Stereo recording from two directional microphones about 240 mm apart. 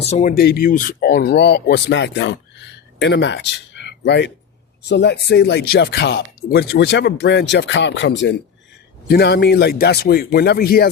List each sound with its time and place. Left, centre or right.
0.0 s speech: left